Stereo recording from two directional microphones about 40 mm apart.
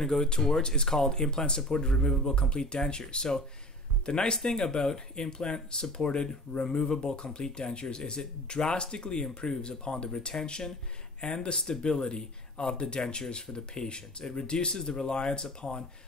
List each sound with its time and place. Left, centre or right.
0.0 s speech: centre